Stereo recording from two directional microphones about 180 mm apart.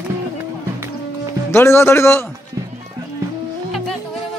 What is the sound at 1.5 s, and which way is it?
Speech, 15° left (ahead or behind).